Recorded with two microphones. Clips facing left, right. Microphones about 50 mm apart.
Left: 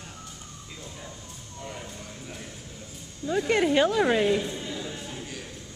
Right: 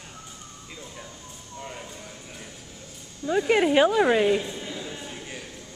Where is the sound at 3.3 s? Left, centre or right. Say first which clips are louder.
Right 2 dB; centre.